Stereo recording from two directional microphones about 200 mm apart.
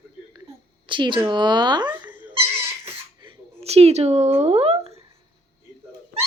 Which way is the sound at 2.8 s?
25° right (ahead or behind).